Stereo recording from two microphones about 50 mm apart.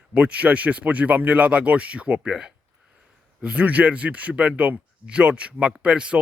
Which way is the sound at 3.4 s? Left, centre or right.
Right.